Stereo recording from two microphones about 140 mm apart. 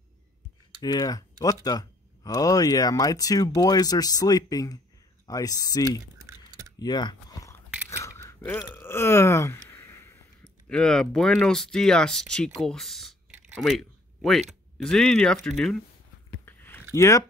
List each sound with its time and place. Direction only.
0.8 s speech: 30° left (ahead or behind)
6.8 s typing: 30° left (ahead or behind)
7.9 s a sound: 20° left (ahead or behind)
8.5 s speech: 15° left (ahead or behind)
10.4 s speech: 5° left (ahead or behind)
13.6 s a sound: centre (ahead or behind)
14.8 s speech: 5° left (ahead or behind)
16.4 s a sound: 15° left (ahead or behind)
16.9 s speech: 20° left (ahead or behind)